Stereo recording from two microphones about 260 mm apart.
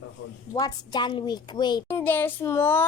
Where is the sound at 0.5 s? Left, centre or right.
Centre.